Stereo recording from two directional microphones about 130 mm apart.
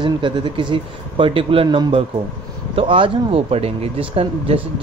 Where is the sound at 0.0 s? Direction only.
40° right (ahead or behind).